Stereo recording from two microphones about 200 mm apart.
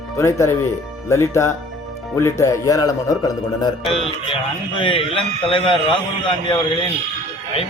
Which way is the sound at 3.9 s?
30° left (ahead or behind).